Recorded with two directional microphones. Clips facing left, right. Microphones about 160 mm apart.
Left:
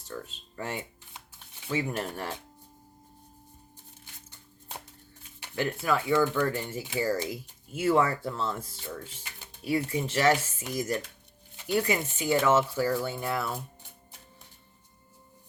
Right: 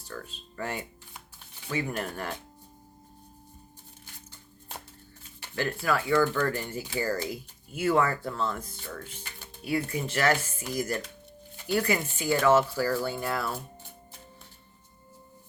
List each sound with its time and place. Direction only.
0.0 s speech: 25° left (ahead or behind)
5.4 s speech: 20° left (ahead or behind)